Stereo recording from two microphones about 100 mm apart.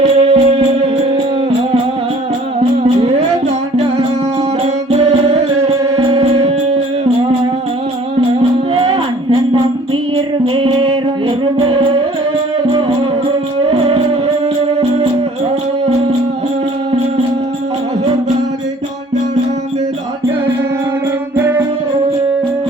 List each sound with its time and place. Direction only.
0.0 s music: 75° right (ahead or behind)
2.8 s music: 80° right
4.6 s music: 75° right (ahead or behind)
8.4 s music: 60° right (ahead or behind)
13.2 s music: 65° right (ahead or behind)
21.3 s music: 20° right (ahead or behind)